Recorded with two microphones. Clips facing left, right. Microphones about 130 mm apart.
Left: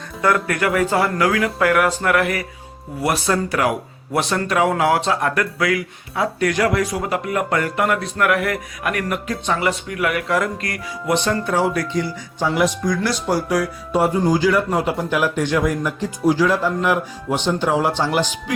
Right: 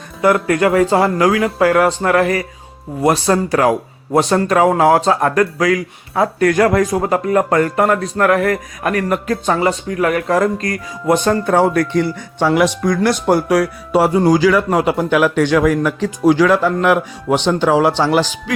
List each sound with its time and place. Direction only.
0.2 s speech: 25° right (ahead or behind); by 18.3 s 85° right